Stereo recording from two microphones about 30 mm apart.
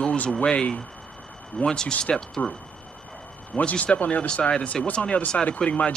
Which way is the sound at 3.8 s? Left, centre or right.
Left.